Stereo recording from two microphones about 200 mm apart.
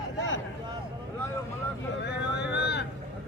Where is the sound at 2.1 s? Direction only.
55° left (ahead or behind).